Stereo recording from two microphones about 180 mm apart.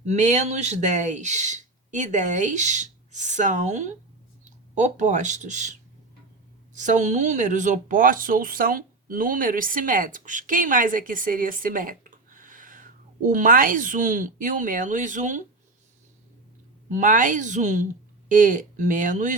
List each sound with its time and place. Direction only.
0.0 s speech: 40° right (ahead or behind)
6.7 s speech: 40° right (ahead or behind)
16.9 s speech: 45° right (ahead or behind)